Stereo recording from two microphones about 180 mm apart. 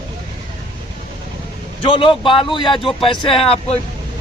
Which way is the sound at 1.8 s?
25° left (ahead or behind).